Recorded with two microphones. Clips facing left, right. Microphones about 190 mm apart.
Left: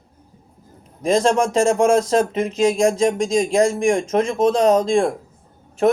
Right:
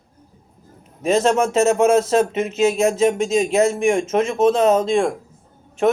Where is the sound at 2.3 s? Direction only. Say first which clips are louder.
Left 1 dB; 30° left (ahead or behind).